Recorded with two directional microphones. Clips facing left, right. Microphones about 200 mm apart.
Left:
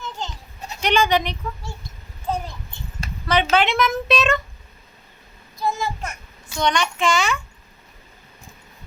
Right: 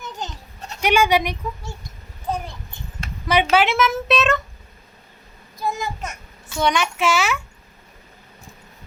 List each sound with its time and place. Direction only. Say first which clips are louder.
0.8 s speech: right 1 dB; 10° right (ahead or behind)
3.2 s a woman's voice: right 1 dB; 10° right (ahead or behind)
5.5 s a child's voice: left 1 dB; 15° right (ahead or behind)